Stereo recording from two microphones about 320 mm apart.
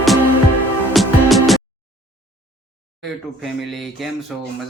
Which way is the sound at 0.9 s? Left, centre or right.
Centre.